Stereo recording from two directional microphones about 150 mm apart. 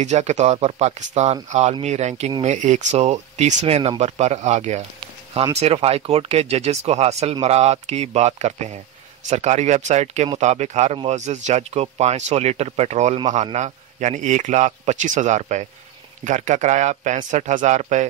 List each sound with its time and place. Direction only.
0.0 s speech: 50° right (ahead or behind)